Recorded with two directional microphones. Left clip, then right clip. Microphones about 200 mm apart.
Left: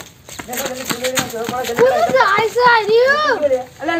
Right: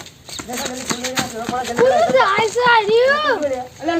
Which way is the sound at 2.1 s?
Centre (ahead or behind).